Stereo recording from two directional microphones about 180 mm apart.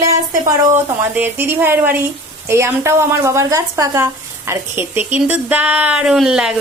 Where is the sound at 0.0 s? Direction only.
15° right (ahead or behind).